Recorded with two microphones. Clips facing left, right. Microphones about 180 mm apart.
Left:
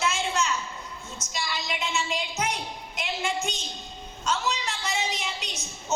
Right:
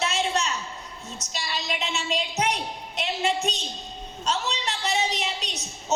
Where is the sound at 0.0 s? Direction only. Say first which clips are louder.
Right 1 dB; 35° right (ahead or behind).